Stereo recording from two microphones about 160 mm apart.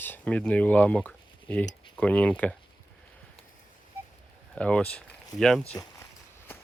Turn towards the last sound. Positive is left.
turn(degrees=15)  # may be behind; listen again after turning